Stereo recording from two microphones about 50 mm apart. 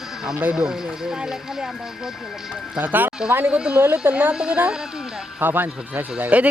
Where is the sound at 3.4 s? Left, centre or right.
Right.